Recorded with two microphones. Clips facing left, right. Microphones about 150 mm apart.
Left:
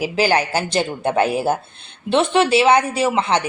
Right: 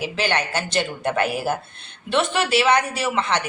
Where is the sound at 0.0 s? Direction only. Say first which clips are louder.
Left 6 dB; 35° left (ahead or behind).